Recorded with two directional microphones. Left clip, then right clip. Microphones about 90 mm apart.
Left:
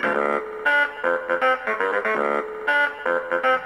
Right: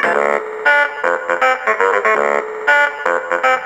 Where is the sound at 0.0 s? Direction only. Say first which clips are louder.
Right 7 dB; 35° right (ahead or behind).